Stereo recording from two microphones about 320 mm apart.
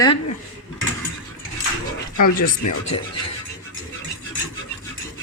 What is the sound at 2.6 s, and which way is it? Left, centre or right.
Speech, left.